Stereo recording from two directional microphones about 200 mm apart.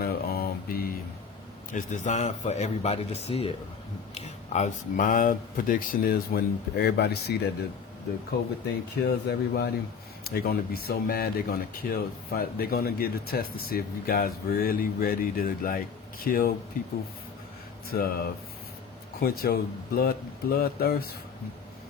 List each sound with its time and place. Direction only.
0.0 s mantra: 50° left (ahead or behind)
1.7 s a man's voice: 40° left (ahead or behind); by 7.5 s 55° left (ahead or behind)
9.0 s speech: 55° left (ahead or behind)
17.9 s speech: 45° left (ahead or behind)